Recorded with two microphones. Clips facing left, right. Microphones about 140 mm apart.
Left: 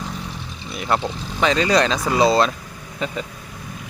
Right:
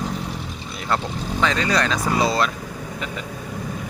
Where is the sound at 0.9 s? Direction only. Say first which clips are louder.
Left 1 dB; 15° left (ahead or behind).